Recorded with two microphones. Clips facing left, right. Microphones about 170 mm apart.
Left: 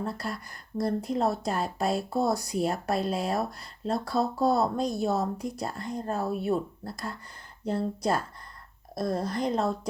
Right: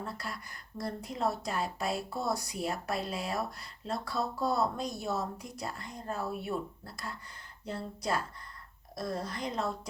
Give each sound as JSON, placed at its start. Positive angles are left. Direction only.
{"t": 0.0, "sound": "speech", "side_deg": 40}